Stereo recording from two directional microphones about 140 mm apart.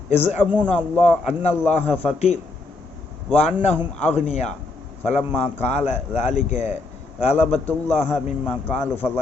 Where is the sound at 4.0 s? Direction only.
50° left (ahead or behind).